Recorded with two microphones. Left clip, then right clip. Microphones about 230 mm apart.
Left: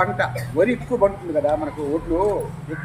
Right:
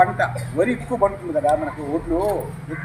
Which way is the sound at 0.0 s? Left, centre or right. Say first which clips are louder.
Right 3 dB; centre.